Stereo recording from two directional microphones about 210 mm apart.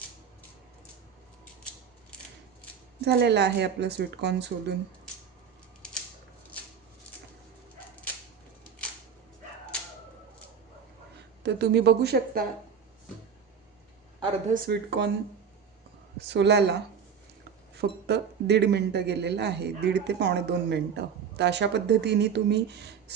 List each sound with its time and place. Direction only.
3.0 s speech: 50° right (ahead or behind)
11.4 s speech: 55° right (ahead or behind)
14.5 s speech: 45° right (ahead or behind)
16.1 s speech: 55° right (ahead or behind)